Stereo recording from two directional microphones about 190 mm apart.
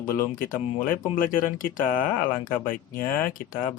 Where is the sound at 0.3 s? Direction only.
45° left (ahead or behind).